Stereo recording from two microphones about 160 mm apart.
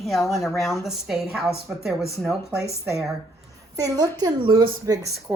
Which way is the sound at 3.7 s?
20° right (ahead or behind).